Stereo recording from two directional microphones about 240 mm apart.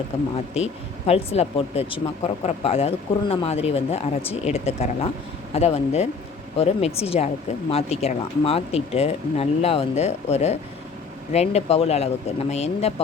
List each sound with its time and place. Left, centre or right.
0.1 s speech: left